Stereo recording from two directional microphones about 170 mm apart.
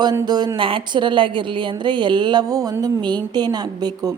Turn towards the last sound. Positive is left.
turn(degrees=-20)  # may be behind; listen again after turning